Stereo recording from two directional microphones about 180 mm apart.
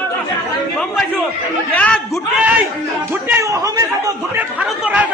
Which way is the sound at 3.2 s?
15° right (ahead or behind).